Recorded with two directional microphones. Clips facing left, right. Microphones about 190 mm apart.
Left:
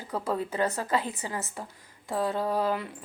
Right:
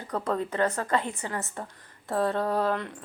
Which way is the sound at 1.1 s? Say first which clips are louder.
Right 1 dB; 20° left (ahead or behind).